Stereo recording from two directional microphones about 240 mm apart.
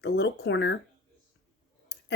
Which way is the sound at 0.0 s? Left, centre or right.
Left.